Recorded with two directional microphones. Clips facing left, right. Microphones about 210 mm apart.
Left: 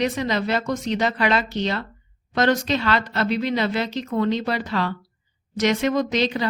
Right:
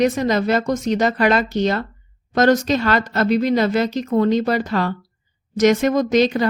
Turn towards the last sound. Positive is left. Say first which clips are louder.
# right 6 dB
turn(degrees=-45)  # may be behind; listen again after turning